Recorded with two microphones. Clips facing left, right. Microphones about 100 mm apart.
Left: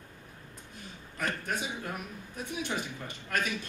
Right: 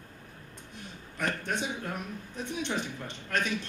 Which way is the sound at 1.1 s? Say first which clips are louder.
Right 2 dB; 5° left (ahead or behind).